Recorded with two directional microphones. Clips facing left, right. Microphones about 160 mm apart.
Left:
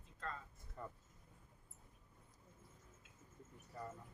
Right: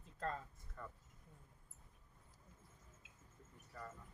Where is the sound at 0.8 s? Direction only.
20° left (ahead or behind).